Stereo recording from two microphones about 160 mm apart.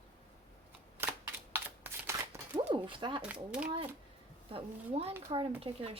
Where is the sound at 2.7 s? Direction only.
30° right (ahead or behind).